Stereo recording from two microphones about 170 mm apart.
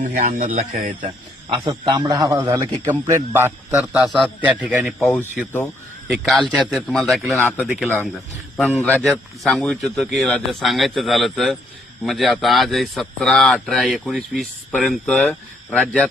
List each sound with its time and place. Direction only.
0.0 s speech: 45° right (ahead or behind)
1.5 s a man's voice: 30° right (ahead or behind); by 4.9 s 5° right (ahead or behind)
4.9 s a man's voice: 10° left (ahead or behind)
8.5 s a man's voice: 5° left (ahead or behind)